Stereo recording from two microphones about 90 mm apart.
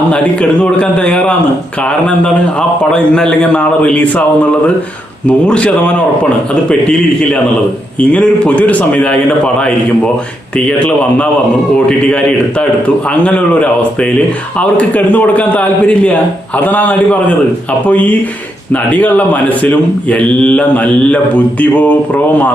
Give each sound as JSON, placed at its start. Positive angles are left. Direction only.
{"t": 0.6, "sound": "speech", "side_deg": 10}
{"t": 5.2, "sound": "speech", "side_deg": 15}
{"t": 10.7, "sound": "speech", "side_deg": 15}